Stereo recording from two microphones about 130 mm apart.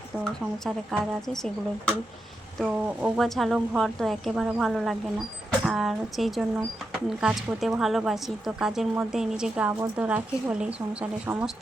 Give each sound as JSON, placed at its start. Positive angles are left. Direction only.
{"t": 0.6, "sound": "a woman's voice", "side_deg": 5}